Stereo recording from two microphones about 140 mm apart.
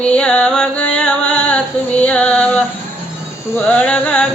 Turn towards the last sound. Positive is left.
turn(degrees=10)  # may be behind; listen again after turning